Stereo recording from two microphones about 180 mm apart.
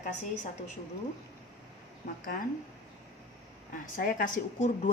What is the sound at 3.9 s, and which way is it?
Speech, 50° left (ahead or behind).